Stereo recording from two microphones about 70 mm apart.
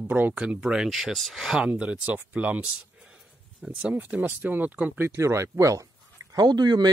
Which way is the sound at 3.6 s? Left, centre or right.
Centre.